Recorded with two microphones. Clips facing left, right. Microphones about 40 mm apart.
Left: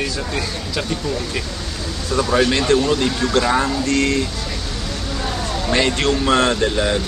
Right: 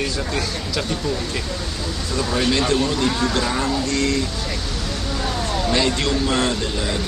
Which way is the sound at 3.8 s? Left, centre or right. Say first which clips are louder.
Left 3 dB; left.